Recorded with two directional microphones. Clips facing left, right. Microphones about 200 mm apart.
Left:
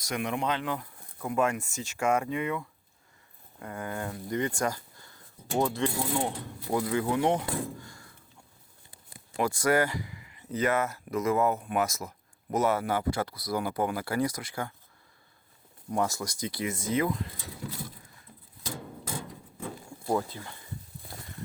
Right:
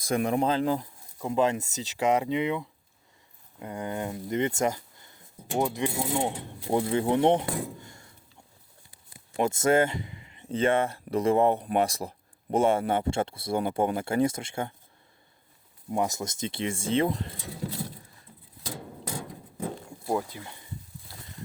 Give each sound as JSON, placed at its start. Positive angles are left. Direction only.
{"t": 0.1, "sound": "speech", "side_deg": -35}
{"t": 1.2, "sound": "speech", "side_deg": -20}
{"t": 9.4, "sound": "speech", "side_deg": -25}
{"t": 15.9, "sound": "speech", "side_deg": -20}
{"t": 20.1, "sound": "speech", "side_deg": -10}